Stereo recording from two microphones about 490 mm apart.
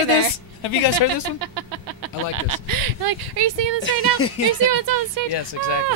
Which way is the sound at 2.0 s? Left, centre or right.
Right.